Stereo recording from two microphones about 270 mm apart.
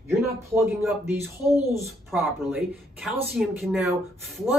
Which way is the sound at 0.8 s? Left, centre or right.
Centre.